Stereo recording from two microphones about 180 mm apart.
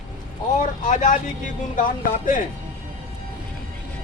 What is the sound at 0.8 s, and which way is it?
Speech, 45° left (ahead or behind).